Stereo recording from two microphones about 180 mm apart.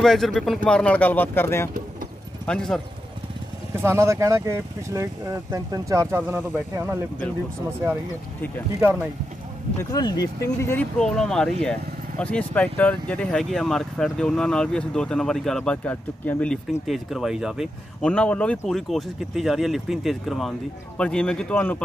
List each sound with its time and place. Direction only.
0.0 s speech: centre (ahead or behind)
3.7 s speech: 15° right (ahead or behind)
9.8 s speech: 20° left (ahead or behind)